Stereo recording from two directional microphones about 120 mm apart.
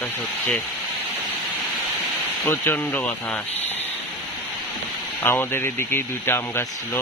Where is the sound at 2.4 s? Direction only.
20° left (ahead or behind).